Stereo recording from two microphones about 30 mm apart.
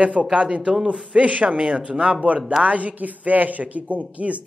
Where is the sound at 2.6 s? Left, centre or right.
Right.